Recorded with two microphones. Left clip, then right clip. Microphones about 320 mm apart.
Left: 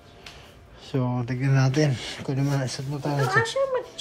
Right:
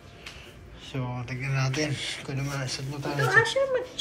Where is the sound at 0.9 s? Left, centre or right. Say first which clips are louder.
Left 7 dB; left.